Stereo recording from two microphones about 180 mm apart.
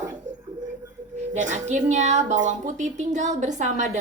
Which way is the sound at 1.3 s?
45° right (ahead or behind).